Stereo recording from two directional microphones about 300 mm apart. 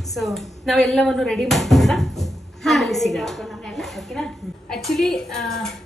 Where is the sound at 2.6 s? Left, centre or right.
Centre.